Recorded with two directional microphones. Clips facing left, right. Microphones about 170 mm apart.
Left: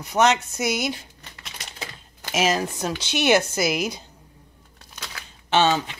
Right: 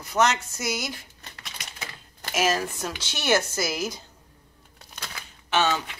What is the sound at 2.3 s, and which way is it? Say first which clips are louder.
Speech: left 2 dB; 20° left (ahead or behind).